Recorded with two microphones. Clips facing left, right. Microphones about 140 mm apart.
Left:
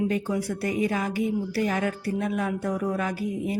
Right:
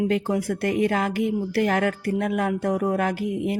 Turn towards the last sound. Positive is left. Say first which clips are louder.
# right 4 dB
turn(degrees=-70)  # may be behind; listen again after turning